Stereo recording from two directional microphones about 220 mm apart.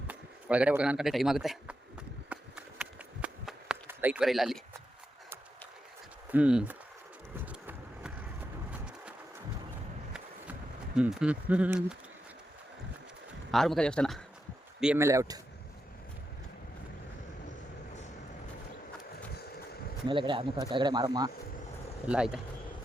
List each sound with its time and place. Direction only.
0.1 s speech: 5° right (ahead or behind)
2.3 s a sound: 5° right (ahead or behind)
6.3 s speech: 5° right (ahead or behind)
7.3 s a sound: 5° right (ahead or behind)
10.9 s speech: 5° right (ahead or behind)
13.5 s speech: centre (ahead or behind)
14.8 s speech: 10° right (ahead or behind)
20.1 s speech: 20° right (ahead or behind)
22.0 s speech: 5° right (ahead or behind)